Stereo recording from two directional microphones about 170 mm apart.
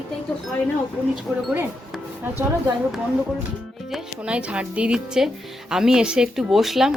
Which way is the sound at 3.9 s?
5° right (ahead or behind).